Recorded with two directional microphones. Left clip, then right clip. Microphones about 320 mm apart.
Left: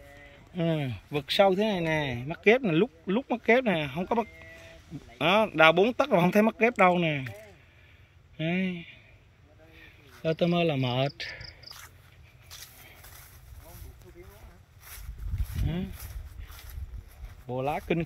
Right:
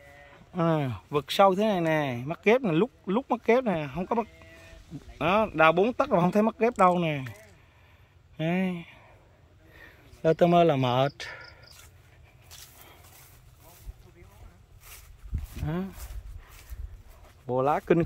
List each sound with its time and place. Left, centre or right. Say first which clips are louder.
0.6 s speech: right 4 dB; centre
8.4 s speech: right 1 dB; centre
10.2 s speech: right 6 dB; centre
12.4 s a sound: left 2 dB; centre
15.5 s a sound: right 3 dB; centre
17.6 s speech: right 6 dB; centre